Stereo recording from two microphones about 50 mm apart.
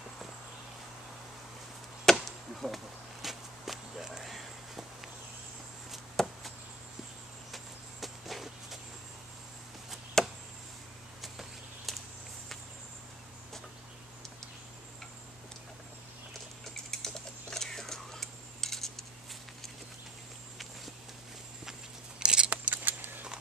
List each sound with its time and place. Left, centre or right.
2.2 s walk: centre
6.1 s a sound: centre
7.5 s walk: centre
10.2 s chop: centre
11.1 s a sound: centre
16.7 s typing: centre
22.2 s scissors: centre
22.5 s scissors: right